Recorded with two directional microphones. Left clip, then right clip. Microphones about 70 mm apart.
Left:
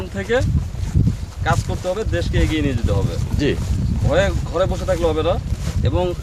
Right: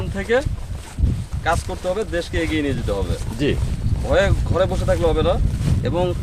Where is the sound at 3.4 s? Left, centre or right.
Left.